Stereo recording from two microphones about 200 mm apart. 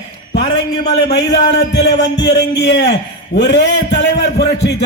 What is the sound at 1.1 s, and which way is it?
A man's voice, 55° left (ahead or behind).